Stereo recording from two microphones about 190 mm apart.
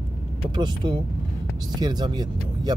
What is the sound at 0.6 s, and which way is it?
Speech, 25° right (ahead or behind).